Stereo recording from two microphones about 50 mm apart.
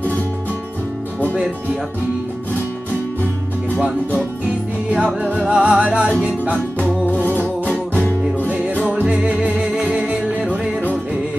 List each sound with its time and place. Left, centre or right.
5.0 s music: right
7.1 s music: left
9.0 s music: right